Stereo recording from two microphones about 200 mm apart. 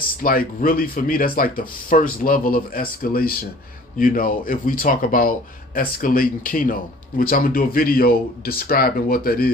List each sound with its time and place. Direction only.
0.2 s speech: 45° left (ahead or behind)